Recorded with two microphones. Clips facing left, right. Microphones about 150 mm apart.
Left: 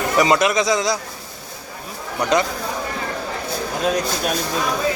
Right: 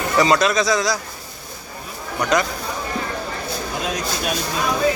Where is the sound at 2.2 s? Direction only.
25° left (ahead or behind).